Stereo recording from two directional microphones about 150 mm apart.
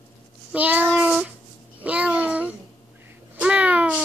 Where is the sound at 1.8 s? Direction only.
10° right (ahead or behind).